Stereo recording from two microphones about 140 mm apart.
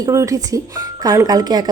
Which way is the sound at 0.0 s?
20° right (ahead or behind).